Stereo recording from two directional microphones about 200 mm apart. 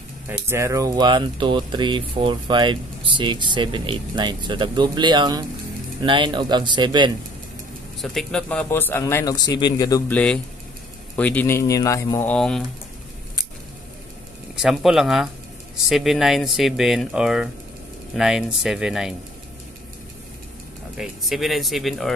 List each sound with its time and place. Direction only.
0.3 s speech: 15° right (ahead or behind)
8.0 s speech: centre (ahead or behind)
14.5 s speech: 5° right (ahead or behind)
20.9 s speech: centre (ahead or behind)